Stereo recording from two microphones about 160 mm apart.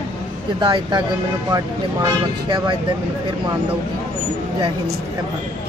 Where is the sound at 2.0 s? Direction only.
25° right (ahead or behind).